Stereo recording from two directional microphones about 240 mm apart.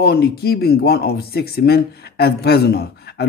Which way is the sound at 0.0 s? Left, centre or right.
Left.